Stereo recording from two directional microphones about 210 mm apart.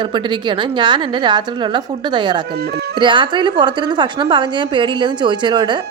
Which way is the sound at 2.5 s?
50° right (ahead or behind).